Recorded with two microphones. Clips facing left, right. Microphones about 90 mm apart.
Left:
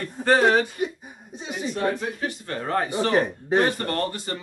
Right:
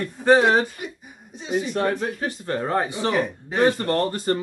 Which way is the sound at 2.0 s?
30° right (ahead or behind).